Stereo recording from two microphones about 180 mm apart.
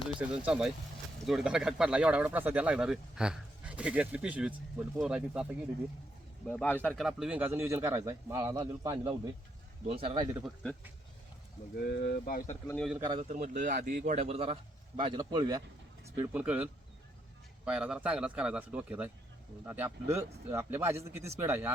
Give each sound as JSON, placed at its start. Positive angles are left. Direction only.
{"t": 0.2, "sound": "a man's voice", "side_deg": -5}
{"t": 6.5, "sound": "speech", "side_deg": 10}
{"t": 9.8, "sound": "speech", "side_deg": -30}
{"t": 10.4, "sound": "speech", "side_deg": 5}
{"t": 11.8, "sound": "speech", "side_deg": 60}
{"t": 13.0, "sound": "a man's voice", "side_deg": -25}
{"t": 13.2, "sound": "speech", "side_deg": -40}
{"t": 14.0, "sound": "a man's voice", "side_deg": -40}
{"t": 16.1, "sound": "speech", "side_deg": -10}
{"t": 17.7, "sound": "a man's voice", "side_deg": -5}